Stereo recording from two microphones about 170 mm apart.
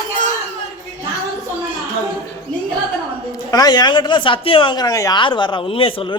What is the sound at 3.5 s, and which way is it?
Speech, 25° left (ahead or behind).